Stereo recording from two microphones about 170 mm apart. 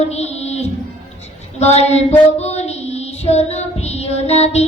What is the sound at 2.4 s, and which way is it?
Child singing, 40° left (ahead or behind).